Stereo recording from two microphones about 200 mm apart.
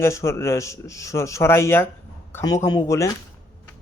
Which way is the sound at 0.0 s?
15° left (ahead or behind).